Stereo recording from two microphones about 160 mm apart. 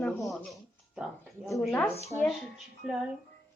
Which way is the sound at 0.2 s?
Centre (ahead or behind).